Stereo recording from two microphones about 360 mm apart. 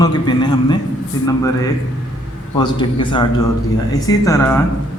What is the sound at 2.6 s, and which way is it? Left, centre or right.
A man's voice, centre.